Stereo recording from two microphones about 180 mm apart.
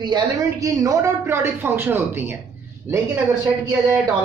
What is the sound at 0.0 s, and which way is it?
A man's voice, 20° right (ahead or behind).